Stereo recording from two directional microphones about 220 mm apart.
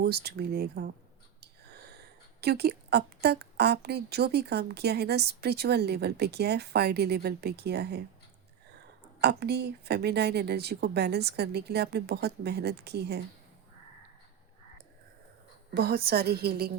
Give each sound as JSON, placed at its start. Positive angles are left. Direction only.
{"t": 0.0, "sound": "a woman's voice", "side_deg": -45}
{"t": 2.4, "sound": "a woman's voice", "side_deg": -45}
{"t": 9.2, "sound": "a woman's voice", "side_deg": -50}
{"t": 15.7, "sound": "a woman's voice", "side_deg": -45}